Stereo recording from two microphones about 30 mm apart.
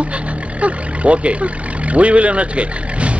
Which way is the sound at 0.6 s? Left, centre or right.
Right.